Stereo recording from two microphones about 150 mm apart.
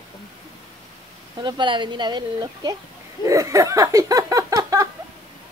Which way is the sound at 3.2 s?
20° right (ahead or behind).